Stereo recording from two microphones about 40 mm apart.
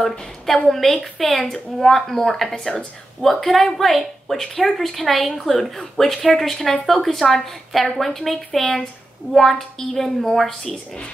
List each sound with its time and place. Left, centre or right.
0.7 s speech: centre
2.5 s speech: left
3.2 s speech: centre